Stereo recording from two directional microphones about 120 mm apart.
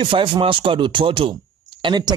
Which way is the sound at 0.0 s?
45° right (ahead or behind).